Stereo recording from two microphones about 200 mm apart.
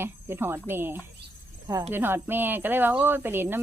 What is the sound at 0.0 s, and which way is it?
Speech, 10° right (ahead or behind).